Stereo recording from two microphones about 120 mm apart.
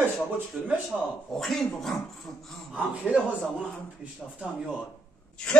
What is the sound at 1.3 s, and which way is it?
Speech, 5° left (ahead or behind).